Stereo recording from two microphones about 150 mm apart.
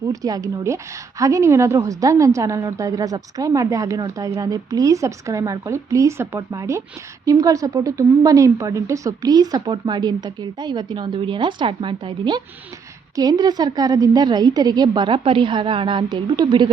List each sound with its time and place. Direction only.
0.1 s a woman's voice: 25° right (ahead or behind)